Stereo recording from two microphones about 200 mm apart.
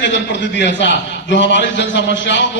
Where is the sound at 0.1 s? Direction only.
60° left (ahead or behind).